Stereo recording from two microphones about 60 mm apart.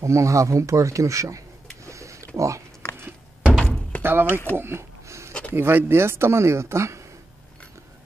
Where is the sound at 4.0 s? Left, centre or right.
Right.